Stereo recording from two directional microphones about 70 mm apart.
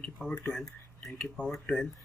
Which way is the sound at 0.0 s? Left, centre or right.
Centre.